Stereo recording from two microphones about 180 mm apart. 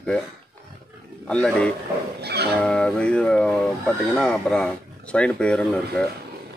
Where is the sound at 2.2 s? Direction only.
65° right (ahead or behind).